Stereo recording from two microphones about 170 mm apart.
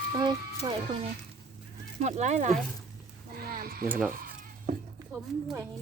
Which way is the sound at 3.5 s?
60° right (ahead or behind).